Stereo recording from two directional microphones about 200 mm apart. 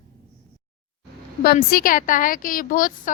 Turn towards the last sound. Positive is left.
turn(degrees=45)  # may be behind; listen again after turning